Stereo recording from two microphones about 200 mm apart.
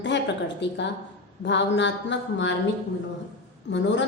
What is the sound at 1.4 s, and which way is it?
A woman's voice, 65° left (ahead or behind).